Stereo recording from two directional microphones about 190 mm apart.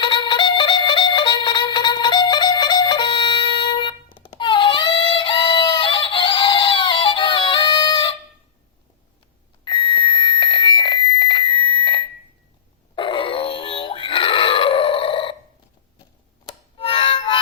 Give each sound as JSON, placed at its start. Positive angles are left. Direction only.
{"t": 0.0, "sound": "music", "side_deg": 25}
{"t": 9.6, "sound": "music", "side_deg": 25}
{"t": 16.7, "sound": "music", "side_deg": 30}